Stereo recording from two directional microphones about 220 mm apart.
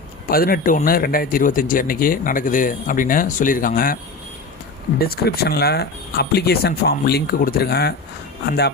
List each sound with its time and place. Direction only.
0.3 s speech: 40° left (ahead or behind)
4.9 s speech: 45° left (ahead or behind)